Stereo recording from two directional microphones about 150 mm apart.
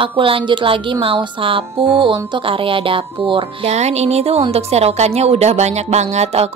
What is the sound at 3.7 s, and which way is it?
Speech, 45° right (ahead or behind).